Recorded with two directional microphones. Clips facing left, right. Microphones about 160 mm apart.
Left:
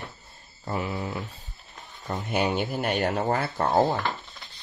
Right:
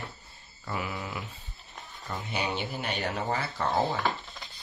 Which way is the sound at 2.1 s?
50° left (ahead or behind).